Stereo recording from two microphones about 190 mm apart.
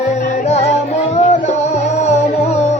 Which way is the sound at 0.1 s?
35° left (ahead or behind).